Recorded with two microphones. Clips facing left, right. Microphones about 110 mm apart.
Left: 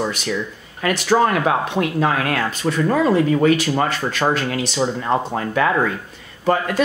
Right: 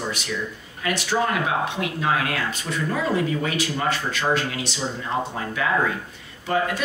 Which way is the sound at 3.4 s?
50° left (ahead or behind).